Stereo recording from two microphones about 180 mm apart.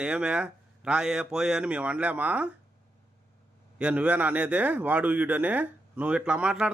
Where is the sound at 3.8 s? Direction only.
5° right (ahead or behind).